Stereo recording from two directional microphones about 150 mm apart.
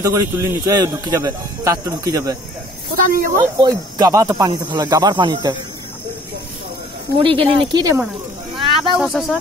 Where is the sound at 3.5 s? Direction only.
25° right (ahead or behind).